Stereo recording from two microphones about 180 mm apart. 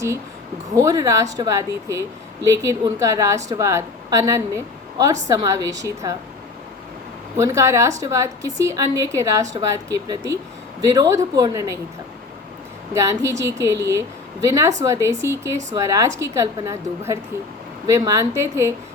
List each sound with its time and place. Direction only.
0.8 s a woman's voice: 15° right (ahead or behind)
7.3 s a woman's voice: 15° right (ahead or behind)
12.9 s a woman's voice: 15° right (ahead or behind)